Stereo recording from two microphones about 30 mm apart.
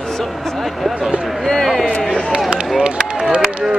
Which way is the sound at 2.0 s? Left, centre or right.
Centre.